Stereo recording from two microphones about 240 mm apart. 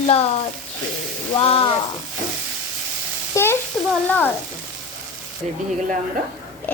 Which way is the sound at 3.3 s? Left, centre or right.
Centre.